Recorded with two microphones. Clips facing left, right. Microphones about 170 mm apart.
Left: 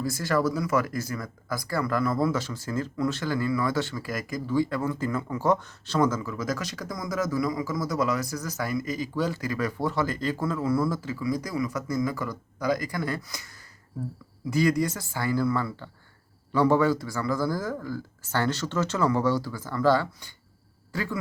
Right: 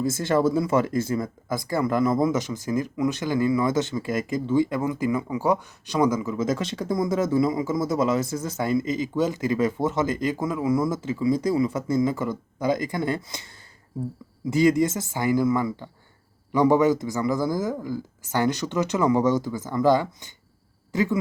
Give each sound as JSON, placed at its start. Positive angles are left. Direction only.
{"t": 0.0, "sound": "speech", "side_deg": -25}
{"t": 14.5, "sound": "a man's voice", "side_deg": -20}